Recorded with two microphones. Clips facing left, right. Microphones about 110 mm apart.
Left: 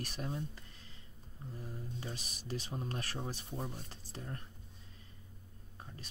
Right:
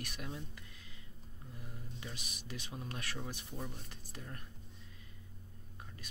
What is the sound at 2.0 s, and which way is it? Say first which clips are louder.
Speech: left 3 dB; 35° left (ahead or behind).